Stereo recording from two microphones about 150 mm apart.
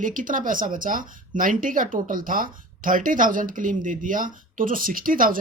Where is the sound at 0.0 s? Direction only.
60° right (ahead or behind).